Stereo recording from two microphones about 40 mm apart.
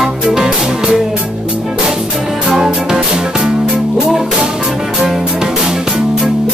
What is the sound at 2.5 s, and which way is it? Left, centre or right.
Music, centre.